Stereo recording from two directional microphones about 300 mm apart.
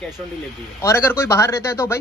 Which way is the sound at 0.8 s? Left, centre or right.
Centre.